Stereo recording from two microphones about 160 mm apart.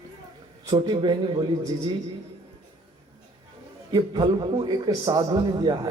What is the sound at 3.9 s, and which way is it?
A man's voice, 25° right (ahead or behind).